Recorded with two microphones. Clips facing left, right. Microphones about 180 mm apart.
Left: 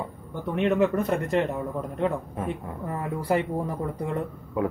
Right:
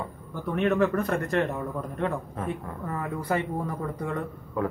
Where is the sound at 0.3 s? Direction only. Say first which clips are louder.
Left 1 dB; 20° left (ahead or behind).